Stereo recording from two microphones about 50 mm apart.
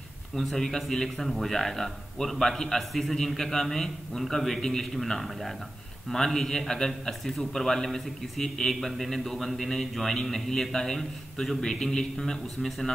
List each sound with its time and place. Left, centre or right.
0.4 s a man's voice: centre